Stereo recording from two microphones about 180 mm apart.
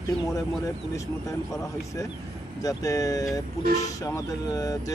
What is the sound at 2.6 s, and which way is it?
Speech, 20° left (ahead or behind).